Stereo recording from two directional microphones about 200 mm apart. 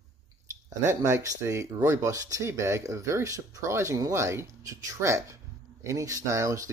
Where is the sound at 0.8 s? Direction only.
15° right (ahead or behind).